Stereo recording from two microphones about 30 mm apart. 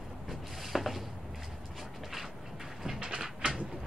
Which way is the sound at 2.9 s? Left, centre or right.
Right.